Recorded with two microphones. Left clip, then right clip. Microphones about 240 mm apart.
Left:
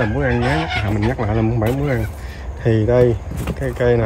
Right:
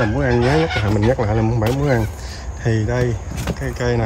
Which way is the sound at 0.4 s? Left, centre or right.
Left.